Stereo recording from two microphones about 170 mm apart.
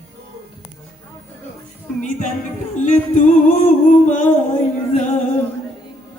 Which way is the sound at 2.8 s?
45° left (ahead or behind).